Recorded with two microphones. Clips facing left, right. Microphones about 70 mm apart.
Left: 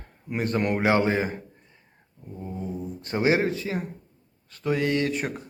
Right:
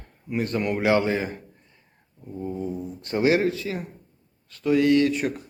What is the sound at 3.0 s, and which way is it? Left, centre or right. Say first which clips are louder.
Speech: right 2 dB; left.